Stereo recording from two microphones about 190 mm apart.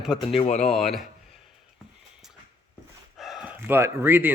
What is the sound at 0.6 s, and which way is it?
Speech, centre (ahead or behind).